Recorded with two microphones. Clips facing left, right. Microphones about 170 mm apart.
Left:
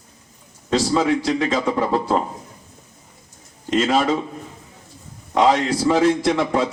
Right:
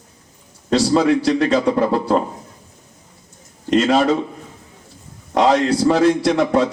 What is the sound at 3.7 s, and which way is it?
Speech, 40° right (ahead or behind).